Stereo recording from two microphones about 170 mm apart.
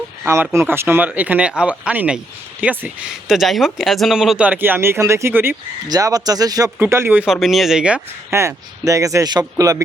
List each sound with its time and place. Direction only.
0.5 s speech: 15° right (ahead or behind)